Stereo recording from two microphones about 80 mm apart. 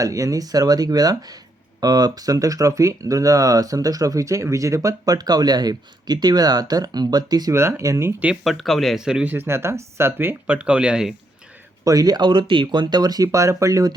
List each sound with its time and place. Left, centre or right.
0.0 s speech: right
7.8 s speech: right
8.4 s speech: centre
9.0 s speech: centre
9.3 s speech: right
10.4 s speech: centre
11.9 s speech: right